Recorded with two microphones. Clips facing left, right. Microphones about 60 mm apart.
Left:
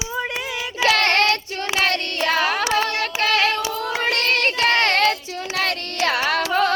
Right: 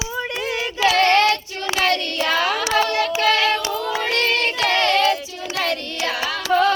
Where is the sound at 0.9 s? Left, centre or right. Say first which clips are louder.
Right 2 dB; left.